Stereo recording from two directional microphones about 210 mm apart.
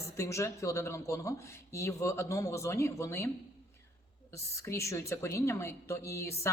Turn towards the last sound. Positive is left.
turn(degrees=15)  # may be behind; listen again after turning